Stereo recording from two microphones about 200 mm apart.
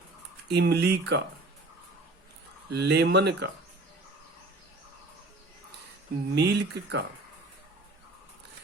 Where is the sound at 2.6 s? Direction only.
60° right (ahead or behind).